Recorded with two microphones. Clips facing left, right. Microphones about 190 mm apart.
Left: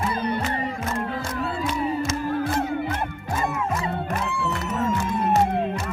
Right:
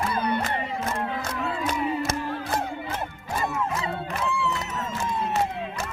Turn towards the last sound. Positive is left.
turn(degrees=55)  # may be behind; listen again after turning